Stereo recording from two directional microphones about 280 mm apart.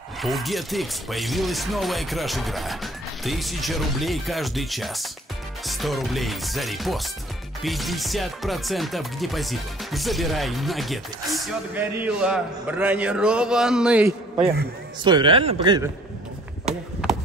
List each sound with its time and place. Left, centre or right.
0.2 s music: centre
15.0 s a man's voice: centre
16.6 s a sound: centre